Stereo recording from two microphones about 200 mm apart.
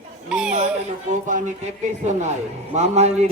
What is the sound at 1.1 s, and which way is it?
A man's voice, 40° right (ahead or behind).